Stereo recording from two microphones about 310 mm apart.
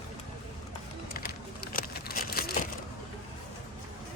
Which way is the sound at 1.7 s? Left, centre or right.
Left.